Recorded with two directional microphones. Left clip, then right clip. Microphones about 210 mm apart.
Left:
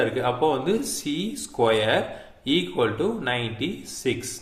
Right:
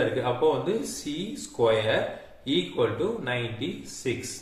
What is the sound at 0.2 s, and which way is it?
Speech, 40° left (ahead or behind).